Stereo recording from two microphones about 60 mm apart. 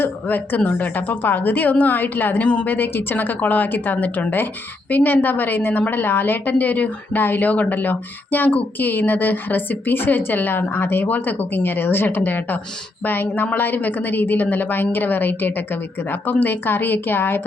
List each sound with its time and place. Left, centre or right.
0.0 s a woman's voice: left